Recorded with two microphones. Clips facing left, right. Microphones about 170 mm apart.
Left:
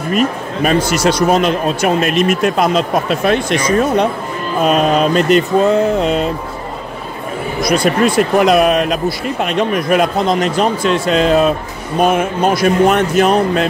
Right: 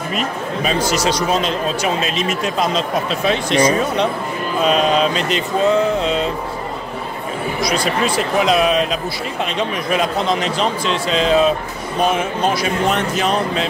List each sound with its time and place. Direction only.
0.1 s speech: 55° left (ahead or behind)
7.6 s speech: 55° left (ahead or behind)